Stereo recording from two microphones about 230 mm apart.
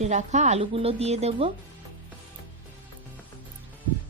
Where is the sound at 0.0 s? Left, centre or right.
Right.